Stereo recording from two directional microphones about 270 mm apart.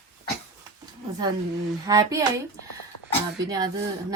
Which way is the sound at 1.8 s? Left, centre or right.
Centre.